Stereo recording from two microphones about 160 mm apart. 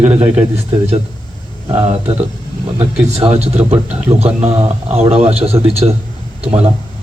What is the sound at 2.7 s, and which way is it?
Speech, 40° right (ahead or behind).